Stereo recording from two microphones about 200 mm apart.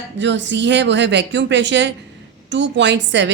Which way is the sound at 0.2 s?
65° right (ahead or behind).